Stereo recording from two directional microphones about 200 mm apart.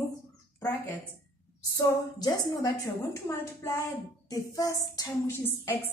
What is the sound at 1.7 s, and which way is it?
A woman's voice, 15° left (ahead or behind).